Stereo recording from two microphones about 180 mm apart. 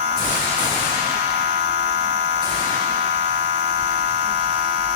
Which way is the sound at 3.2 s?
35° right (ahead or behind).